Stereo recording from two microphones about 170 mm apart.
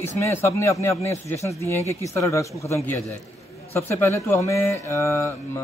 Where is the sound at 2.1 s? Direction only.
15° left (ahead or behind).